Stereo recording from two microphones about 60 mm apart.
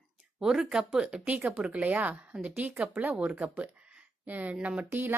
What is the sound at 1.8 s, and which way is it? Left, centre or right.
Speech, right.